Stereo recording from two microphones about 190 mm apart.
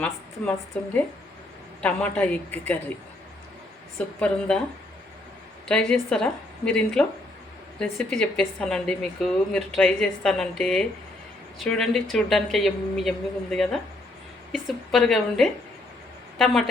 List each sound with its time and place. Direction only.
0.7 s a woman's voice: 5° left (ahead or behind)
3.9 s a woman's voice: 5° left (ahead or behind)
5.6 s a woman's voice: 5° left (ahead or behind)